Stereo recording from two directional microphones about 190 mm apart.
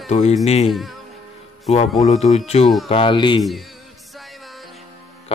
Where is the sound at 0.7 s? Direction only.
Centre (ahead or behind).